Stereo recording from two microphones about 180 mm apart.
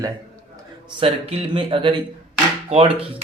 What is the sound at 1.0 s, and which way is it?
Speech, 30° right (ahead or behind).